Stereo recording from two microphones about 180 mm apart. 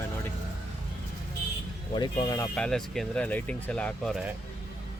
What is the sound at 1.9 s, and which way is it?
Speech, 25° left (ahead or behind).